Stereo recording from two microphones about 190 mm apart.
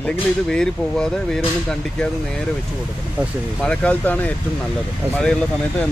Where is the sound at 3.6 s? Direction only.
5° left (ahead or behind).